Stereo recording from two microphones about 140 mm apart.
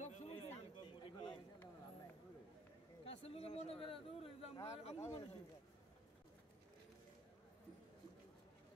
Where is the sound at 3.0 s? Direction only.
45° left (ahead or behind).